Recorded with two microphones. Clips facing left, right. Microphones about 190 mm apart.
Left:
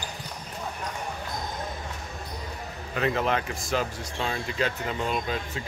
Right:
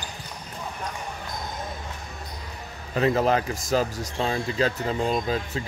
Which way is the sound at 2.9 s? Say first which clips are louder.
Right 5 dB; 35° right (ahead or behind).